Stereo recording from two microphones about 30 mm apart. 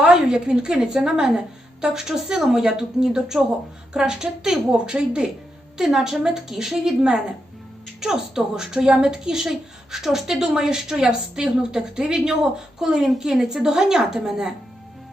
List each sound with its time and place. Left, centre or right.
0.0 s a woman's voice: right
3.9 s a woman's voice: right
5.7 s a woman's voice: centre
12.4 s a woman's voice: centre